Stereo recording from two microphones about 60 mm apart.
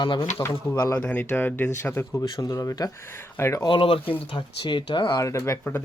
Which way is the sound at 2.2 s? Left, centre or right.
Left.